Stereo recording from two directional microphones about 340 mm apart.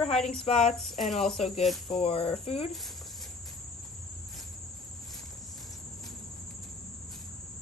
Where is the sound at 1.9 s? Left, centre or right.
Centre.